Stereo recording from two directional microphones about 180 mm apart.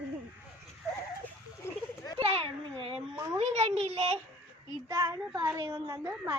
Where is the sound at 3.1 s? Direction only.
15° right (ahead or behind).